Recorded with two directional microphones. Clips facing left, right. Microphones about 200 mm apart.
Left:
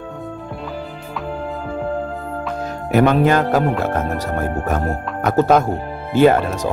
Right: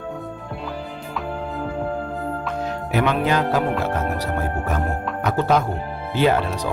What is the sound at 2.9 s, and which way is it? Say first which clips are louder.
Speech: left 7 dB; 50° left (ahead or behind).